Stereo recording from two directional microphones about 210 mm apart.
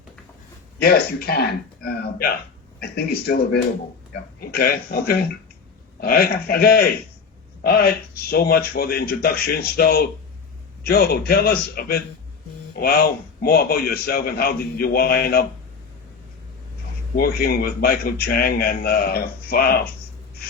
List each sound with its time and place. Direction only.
0.8 s a man's voice: 45° left (ahead or behind)
17.2 s a man's voice: 45° left (ahead or behind)